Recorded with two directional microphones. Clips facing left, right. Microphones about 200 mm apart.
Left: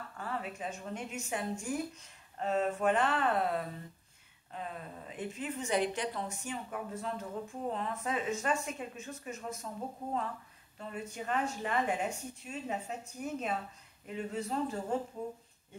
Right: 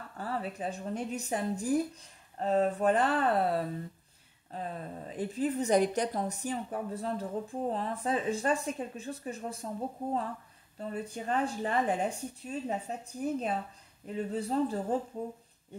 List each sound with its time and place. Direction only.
0.2 s a woman's voice: 35° right (ahead or behind)
10.8 s a woman's voice: 35° right (ahead or behind)